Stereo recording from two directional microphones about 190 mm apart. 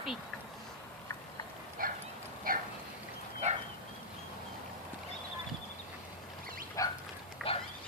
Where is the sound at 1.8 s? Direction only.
45° right (ahead or behind).